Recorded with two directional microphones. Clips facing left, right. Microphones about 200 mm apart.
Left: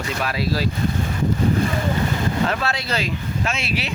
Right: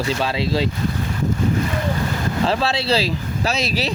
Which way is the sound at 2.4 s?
30° right (ahead or behind).